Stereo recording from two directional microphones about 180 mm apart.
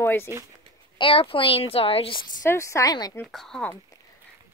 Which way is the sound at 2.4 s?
15° left (ahead or behind).